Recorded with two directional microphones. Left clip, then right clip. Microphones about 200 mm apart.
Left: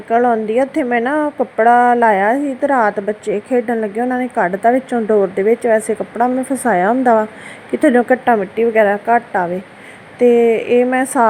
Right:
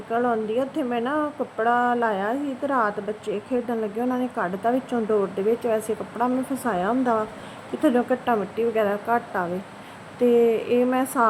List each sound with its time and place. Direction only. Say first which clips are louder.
0.1 s speech: left 10 dB; 20° left (ahead or behind)